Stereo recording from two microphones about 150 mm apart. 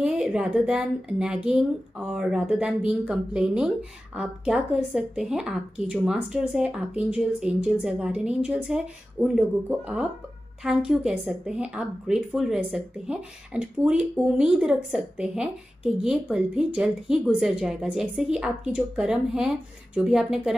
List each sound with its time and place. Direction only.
0.0 s a woman's voice: 5° right (ahead or behind)